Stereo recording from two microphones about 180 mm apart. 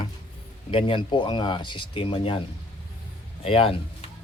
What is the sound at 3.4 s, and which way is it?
Speech, 30° left (ahead or behind).